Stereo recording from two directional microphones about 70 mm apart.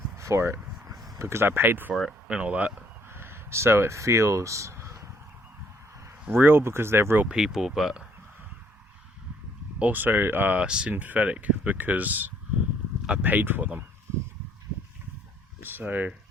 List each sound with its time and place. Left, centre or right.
0.2 s speech: right
1.9 s speech: centre
2.2 s speech: centre
3.1 s speech: right
6.3 s speech: right
7.3 s speech: centre
9.7 s speech: right
10.6 s speech: centre
15.6 s speech: right